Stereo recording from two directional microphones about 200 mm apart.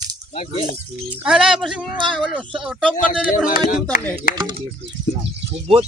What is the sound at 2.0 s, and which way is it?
Speech, 25° right (ahead or behind).